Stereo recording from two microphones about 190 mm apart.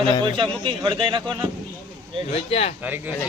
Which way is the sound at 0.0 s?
25° right (ahead or behind).